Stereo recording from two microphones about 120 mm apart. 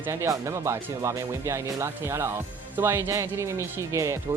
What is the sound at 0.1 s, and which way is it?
Speech, 25° right (ahead or behind).